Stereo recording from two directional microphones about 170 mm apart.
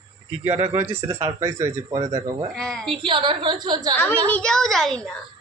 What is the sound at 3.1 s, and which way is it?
Speech, 30° right (ahead or behind).